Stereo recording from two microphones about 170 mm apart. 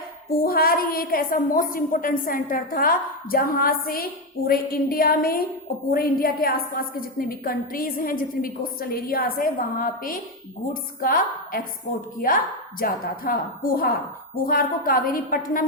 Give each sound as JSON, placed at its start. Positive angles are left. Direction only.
{"t": 0.3, "sound": "a woman's voice", "side_deg": 60}